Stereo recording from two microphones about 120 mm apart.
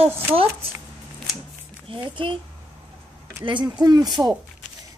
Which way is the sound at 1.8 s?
40° right (ahead or behind).